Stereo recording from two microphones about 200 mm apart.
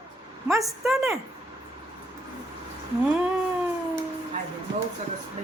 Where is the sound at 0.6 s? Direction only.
Centre (ahead or behind).